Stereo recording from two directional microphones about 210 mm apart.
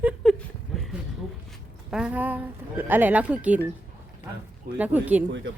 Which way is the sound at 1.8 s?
5° right (ahead or behind).